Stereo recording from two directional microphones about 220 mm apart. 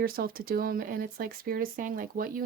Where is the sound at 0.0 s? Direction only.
40° right (ahead or behind).